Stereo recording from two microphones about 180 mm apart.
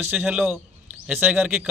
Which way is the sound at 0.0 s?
10° right (ahead or behind).